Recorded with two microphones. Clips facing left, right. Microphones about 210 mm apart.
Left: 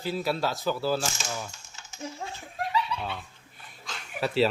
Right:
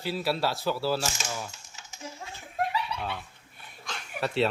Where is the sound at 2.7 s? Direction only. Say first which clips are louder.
Left 3 dB; 60° right (ahead or behind).